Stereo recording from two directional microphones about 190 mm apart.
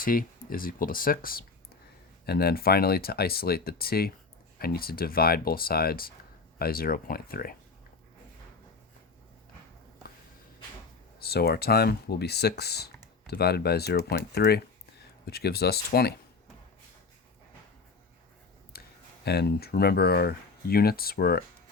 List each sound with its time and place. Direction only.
0.0 s speech: 50° left (ahead or behind)
11.2 s speech: 55° left (ahead or behind)
18.7 s a sound: 55° left (ahead or behind)
19.2 s speech: 60° left (ahead or behind)